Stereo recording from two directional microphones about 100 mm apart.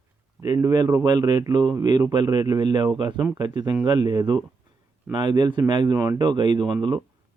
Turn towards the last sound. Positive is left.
turn(degrees=-50)  # may be behind; listen again after turning